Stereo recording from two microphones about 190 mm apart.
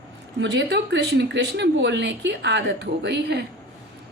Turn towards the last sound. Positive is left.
turn(degrees=-60)  # may be behind; listen again after turning